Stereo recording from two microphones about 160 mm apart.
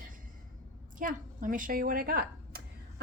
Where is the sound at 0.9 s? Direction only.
55° right (ahead or behind).